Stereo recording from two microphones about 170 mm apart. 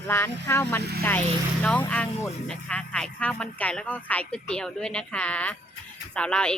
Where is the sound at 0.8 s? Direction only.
70° right (ahead or behind).